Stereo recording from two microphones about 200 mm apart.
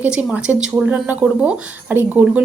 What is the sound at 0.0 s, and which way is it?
Speech, 5° right (ahead or behind).